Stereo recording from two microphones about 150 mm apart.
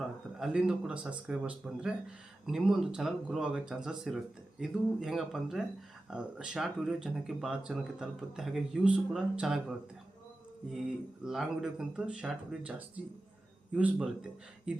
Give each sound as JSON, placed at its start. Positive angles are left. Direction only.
{"t": 0.3, "sound": "speech", "side_deg": -5}
{"t": 11.2, "sound": "speech", "side_deg": -5}
{"t": 13.7, "sound": "speech", "side_deg": -5}